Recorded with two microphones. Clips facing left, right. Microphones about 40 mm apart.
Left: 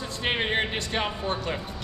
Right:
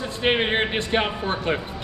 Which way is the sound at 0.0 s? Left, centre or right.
Right.